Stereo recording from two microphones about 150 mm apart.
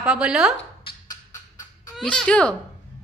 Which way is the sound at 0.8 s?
25° left (ahead or behind).